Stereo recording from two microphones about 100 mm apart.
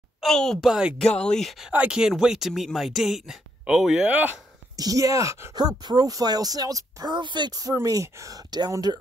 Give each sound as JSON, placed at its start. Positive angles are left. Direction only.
{"t": 0.2, "sound": "speech", "side_deg": 5}
{"t": 1.1, "sound": "speech", "side_deg": 10}
{"t": 1.7, "sound": "speech", "side_deg": -10}
{"t": 4.7, "sound": "speech", "side_deg": -35}
{"t": 5.6, "sound": "speech", "side_deg": -45}
{"t": 7.7, "sound": "speech", "side_deg": -35}